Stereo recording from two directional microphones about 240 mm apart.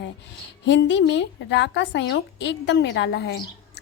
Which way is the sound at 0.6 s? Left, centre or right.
Left.